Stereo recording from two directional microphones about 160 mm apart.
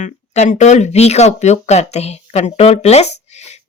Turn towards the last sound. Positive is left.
turn(degrees=45)  # may be behind; listen again after turning